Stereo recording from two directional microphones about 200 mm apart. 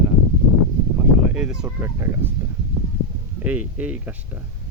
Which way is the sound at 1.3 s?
5° right (ahead or behind).